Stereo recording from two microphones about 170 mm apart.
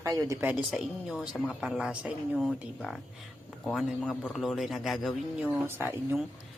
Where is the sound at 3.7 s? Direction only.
Centre (ahead or behind).